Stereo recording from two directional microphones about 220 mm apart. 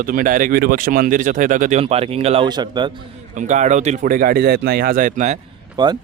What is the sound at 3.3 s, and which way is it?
Speech, 35° right (ahead or behind).